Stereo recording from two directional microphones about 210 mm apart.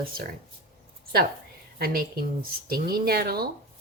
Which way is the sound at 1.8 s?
45° right (ahead or behind).